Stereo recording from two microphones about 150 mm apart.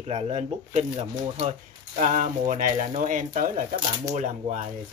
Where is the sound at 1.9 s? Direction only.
55° right (ahead or behind).